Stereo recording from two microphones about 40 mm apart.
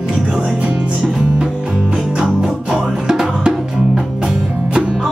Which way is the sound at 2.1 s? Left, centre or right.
Centre.